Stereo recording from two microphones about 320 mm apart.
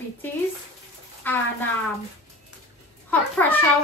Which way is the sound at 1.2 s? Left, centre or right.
Centre.